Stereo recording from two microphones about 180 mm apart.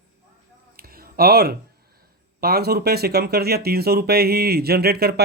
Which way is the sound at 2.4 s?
60° right (ahead or behind).